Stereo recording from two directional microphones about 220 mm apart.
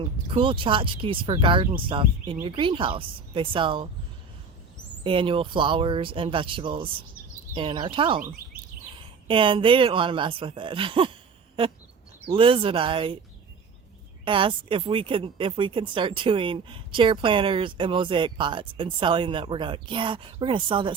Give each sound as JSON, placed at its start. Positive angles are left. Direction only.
{"t": 0.0, "sound": "speech", "side_deg": -25}
{"t": 5.0, "sound": "speech", "side_deg": -25}
{"t": 9.2, "sound": "speech", "side_deg": -25}
{"t": 12.3, "sound": "speech", "side_deg": -25}
{"t": 14.3, "sound": "speech", "side_deg": -25}